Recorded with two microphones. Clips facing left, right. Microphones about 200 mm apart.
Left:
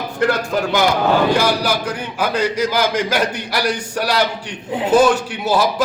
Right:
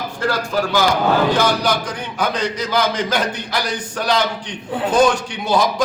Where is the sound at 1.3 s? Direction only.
10° left (ahead or behind).